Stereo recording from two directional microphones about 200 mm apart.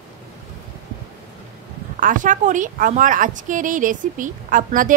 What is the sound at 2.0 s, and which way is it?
A woman's voice, 40° right (ahead or behind).